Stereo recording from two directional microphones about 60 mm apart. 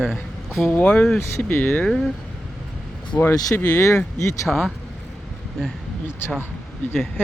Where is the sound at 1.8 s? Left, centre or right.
Centre.